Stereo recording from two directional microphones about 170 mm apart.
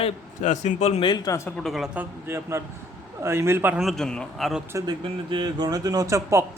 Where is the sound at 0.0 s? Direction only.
45° left (ahead or behind); by 1.4 s 25° left (ahead or behind).